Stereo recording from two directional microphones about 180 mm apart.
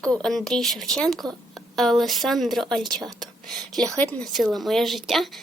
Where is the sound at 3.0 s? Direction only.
20° right (ahead or behind).